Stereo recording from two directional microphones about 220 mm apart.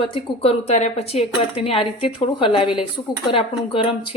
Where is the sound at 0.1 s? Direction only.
25° left (ahead or behind).